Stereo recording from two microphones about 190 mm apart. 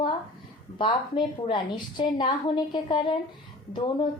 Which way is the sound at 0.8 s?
25° left (ahead or behind).